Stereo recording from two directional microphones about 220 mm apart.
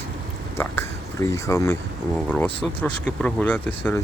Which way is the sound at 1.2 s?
15° left (ahead or behind).